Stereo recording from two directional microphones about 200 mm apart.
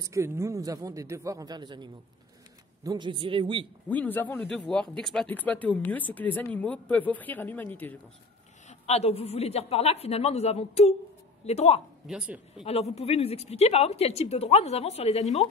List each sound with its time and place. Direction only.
0.0 s a man's voice: 15° right (ahead or behind)
3.9 s speech: 10° left (ahead or behind)
8.6 s speech: 30° left (ahead or behind)
12.1 s speech: 5° right (ahead or behind)
12.6 s speech: 30° left (ahead or behind)